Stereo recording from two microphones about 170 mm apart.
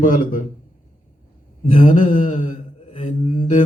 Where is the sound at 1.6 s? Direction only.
50° left (ahead or behind).